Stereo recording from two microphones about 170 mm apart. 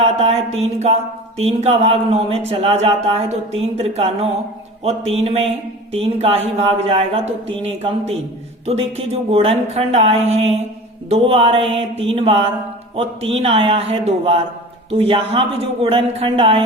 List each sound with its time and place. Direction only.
0.0 s speech: 40° right (ahead or behind)